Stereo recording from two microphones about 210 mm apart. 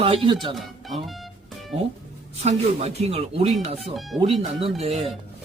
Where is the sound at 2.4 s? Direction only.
30° right (ahead or behind).